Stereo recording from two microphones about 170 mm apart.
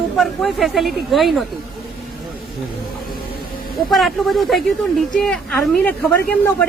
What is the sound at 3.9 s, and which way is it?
Speech, centre (ahead or behind).